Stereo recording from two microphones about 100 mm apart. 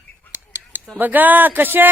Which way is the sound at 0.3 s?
25° right (ahead or behind).